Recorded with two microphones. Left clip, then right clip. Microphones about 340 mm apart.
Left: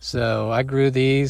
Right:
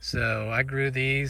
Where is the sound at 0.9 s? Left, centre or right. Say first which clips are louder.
Left 7 dB; left.